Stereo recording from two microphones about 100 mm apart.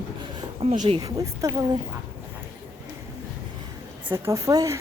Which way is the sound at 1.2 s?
35° right (ahead or behind).